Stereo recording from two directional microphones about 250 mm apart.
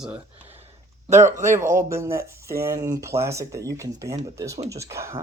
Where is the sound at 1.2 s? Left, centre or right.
Centre.